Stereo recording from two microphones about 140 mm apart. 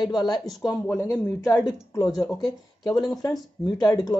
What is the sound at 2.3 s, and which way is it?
Speech, 30° left (ahead or behind).